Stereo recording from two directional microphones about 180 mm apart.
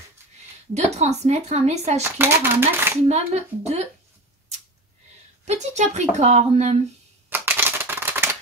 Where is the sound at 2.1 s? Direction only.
10° right (ahead or behind).